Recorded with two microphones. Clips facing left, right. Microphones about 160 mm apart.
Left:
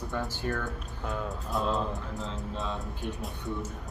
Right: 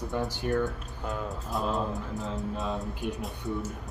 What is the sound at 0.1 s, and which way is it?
Speech, 20° right (ahead or behind).